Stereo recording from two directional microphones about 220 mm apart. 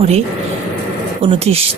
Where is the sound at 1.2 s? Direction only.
25° right (ahead or behind).